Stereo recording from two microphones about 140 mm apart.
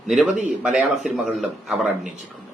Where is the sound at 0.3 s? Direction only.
60° right (ahead or behind).